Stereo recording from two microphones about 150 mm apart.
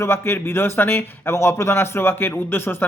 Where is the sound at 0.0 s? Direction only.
15° left (ahead or behind).